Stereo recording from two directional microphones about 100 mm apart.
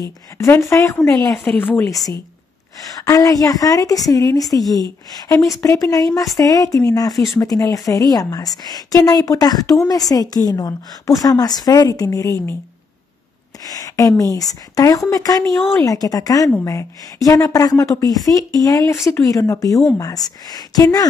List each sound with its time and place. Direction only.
0.0 s a woman's voice: 30° left (ahead or behind)
1.3 s a woman's voice: 10° left (ahead or behind)
1.9 s a woman's voice: 35° left (ahead or behind)
13.7 s a woman's voice: 35° left (ahead or behind)